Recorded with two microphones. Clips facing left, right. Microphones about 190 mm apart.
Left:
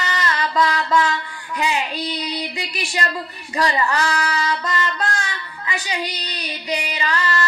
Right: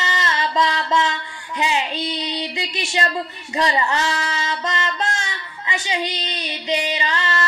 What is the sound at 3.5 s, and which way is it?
Female singing, 20° right (ahead or behind).